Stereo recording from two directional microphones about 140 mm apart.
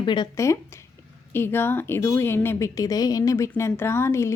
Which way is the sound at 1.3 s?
15° left (ahead or behind).